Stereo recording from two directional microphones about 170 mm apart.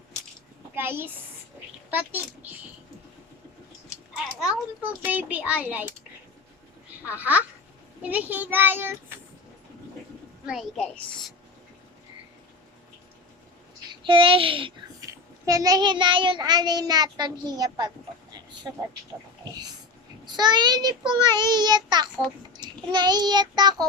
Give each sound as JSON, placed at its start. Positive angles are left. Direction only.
{"t": 0.8, "sound": "a woman's voice", "side_deg": -10}
{"t": 4.8, "sound": "a child's voice", "side_deg": -10}
{"t": 7.2, "sound": "a child's voice", "side_deg": -10}
{"t": 10.4, "sound": "a woman's voice", "side_deg": -5}
{"t": 13.9, "sound": "a child's voice", "side_deg": -30}
{"t": 15.0, "sound": "a child's voice", "side_deg": -20}
{"t": 20.2, "sound": "a child's voice", "side_deg": -25}